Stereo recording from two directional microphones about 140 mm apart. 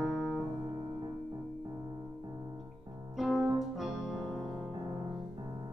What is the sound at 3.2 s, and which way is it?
Music, centre (ahead or behind).